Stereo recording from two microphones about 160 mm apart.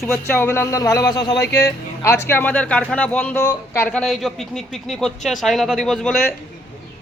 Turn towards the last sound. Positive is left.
turn(degrees=5)  # may be behind; listen again after turning